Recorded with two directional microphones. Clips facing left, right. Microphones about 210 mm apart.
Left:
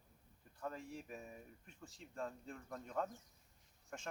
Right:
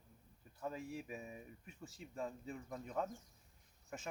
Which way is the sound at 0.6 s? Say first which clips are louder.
Right 2 dB; 5° right (ahead or behind).